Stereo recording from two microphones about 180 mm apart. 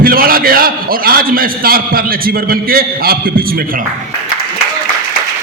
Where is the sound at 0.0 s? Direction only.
55° right (ahead or behind).